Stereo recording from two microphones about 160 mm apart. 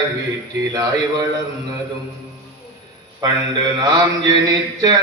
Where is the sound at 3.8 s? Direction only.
25° right (ahead or behind).